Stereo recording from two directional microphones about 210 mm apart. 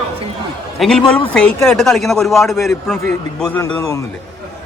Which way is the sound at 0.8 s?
Centre (ahead or behind).